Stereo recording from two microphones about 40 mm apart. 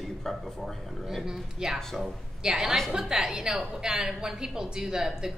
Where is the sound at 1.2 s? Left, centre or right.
Centre.